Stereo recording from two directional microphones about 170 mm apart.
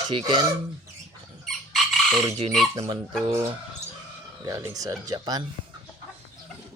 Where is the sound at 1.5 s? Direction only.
Centre (ahead or behind).